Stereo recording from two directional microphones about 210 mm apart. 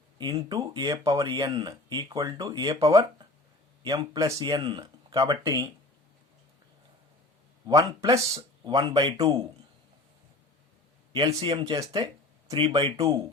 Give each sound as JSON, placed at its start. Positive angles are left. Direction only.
{"t": 0.2, "sound": "speech", "side_deg": -20}
{"t": 7.7, "sound": "speech", "side_deg": -15}
{"t": 11.1, "sound": "speech", "side_deg": -25}